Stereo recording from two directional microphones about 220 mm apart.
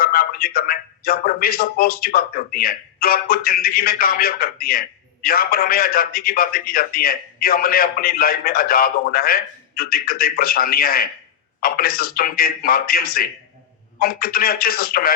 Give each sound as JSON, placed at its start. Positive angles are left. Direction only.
{"t": 0.0, "sound": "a man's voice", "side_deg": 40}